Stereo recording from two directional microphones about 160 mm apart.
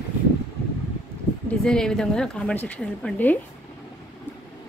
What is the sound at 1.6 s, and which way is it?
A woman's voice, 5° left (ahead or behind).